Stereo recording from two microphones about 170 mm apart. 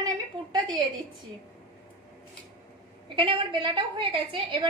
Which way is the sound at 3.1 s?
30° right (ahead or behind).